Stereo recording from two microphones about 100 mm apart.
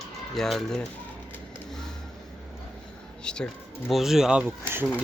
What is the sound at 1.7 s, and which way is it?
Vehicle, 5° left (ahead or behind).